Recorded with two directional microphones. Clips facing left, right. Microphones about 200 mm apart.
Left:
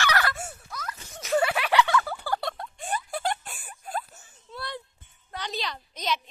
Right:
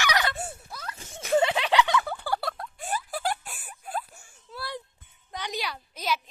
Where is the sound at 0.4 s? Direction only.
30° right (ahead or behind).